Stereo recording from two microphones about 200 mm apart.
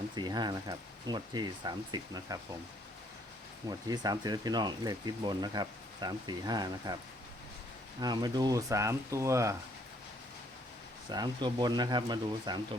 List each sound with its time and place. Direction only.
0.2 s speech: 20° right (ahead or behind)
3.7 s speech: 20° right (ahead or behind)
8.0 s speech: 20° right (ahead or behind)
11.1 s speech: 20° right (ahead or behind)